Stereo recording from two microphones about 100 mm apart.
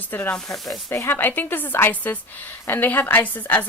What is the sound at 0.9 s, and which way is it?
A woman's voice, 25° left (ahead or behind).